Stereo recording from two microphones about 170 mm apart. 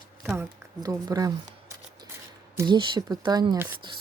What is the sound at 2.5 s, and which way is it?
Speech, 25° right (ahead or behind).